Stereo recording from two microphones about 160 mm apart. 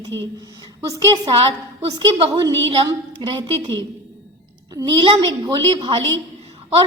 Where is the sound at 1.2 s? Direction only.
35° right (ahead or behind).